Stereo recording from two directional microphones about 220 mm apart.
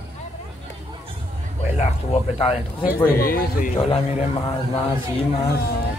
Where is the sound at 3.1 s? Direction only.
40° left (ahead or behind).